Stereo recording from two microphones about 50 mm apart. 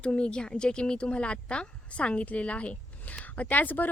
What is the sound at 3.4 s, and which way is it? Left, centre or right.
Speech, left.